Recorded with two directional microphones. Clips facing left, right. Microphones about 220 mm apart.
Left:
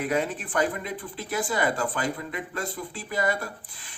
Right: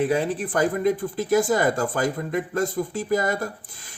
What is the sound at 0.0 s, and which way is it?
Speech, 30° right (ahead or behind).